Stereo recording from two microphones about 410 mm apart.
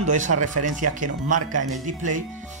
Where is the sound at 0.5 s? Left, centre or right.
Right.